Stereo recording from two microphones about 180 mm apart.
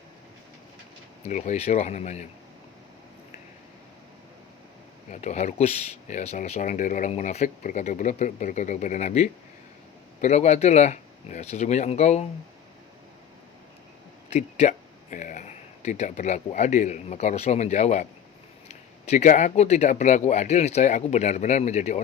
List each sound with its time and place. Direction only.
1.3 s speech: 40° left (ahead or behind)
5.1 s speech: 40° left (ahead or behind)
14.3 s speech: 40° left (ahead or behind)